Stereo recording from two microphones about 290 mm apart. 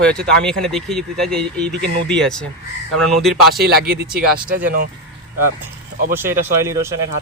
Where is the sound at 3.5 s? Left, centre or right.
Right.